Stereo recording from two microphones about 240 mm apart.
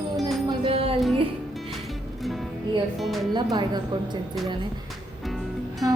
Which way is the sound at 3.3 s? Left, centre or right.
Centre.